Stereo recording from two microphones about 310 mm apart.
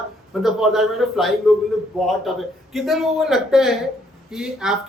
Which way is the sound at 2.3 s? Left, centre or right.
Centre.